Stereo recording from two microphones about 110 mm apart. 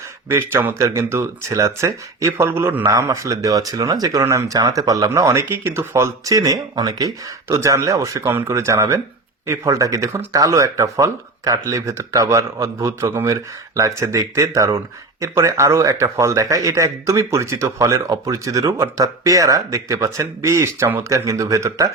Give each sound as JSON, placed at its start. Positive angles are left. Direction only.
{"t": 0.3, "sound": "speech", "side_deg": -20}